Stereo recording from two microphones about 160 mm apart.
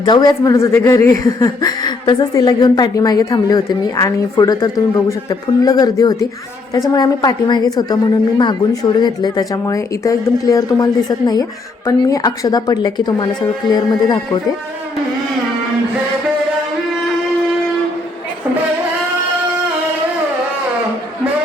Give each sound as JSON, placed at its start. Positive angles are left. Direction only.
{"t": 0.0, "sound": "speech", "side_deg": 25}